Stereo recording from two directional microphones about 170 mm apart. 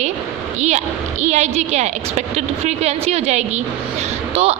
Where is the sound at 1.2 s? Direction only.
40° right (ahead or behind).